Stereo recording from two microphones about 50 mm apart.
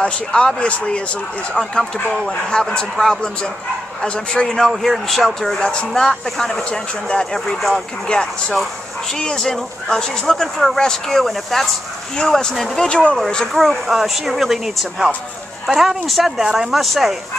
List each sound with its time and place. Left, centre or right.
0.0 s speech: centre
1.5 s speech: centre
5.6 s speech: centre
13.5 s speech: centre